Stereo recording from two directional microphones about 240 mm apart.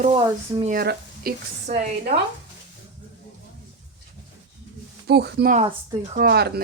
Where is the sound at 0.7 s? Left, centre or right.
Right.